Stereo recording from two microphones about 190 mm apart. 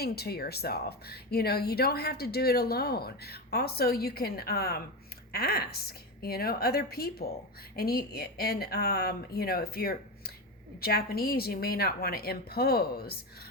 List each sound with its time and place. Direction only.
0.0 s a woman's voice: 55° left (ahead or behind)